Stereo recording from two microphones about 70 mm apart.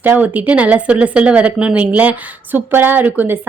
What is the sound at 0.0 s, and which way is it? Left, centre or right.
A woman's voice, right.